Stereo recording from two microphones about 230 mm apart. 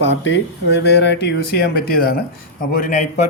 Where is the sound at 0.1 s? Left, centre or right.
Left.